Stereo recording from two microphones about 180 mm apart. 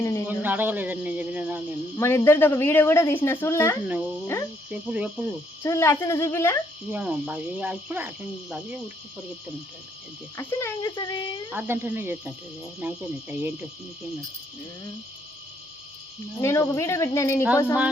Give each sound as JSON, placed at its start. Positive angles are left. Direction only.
{"t": 0.0, "sound": "speech", "side_deg": 15}
{"t": 0.3, "sound": "cricket", "side_deg": -10}
{"t": 2.0, "sound": "speech", "side_deg": 15}
{"t": 3.8, "sound": "cricket", "side_deg": -10}
{"t": 5.6, "sound": "speech", "side_deg": 15}
{"t": 6.9, "sound": "cricket", "side_deg": -5}
{"t": 10.3, "sound": "speech", "side_deg": 15}
{"t": 11.5, "sound": "cricket", "side_deg": -10}
{"t": 16.4, "sound": "speech", "side_deg": 15}